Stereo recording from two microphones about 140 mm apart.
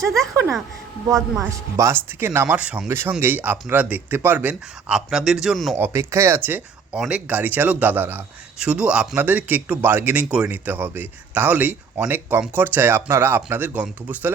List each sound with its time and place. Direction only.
1.0 s speech: 20° right (ahead or behind); by 5.7 s centre (ahead or behind)
5.7 s speech: 15° right (ahead or behind)